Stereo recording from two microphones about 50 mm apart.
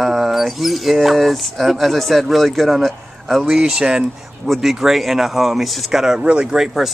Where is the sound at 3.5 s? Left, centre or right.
Centre.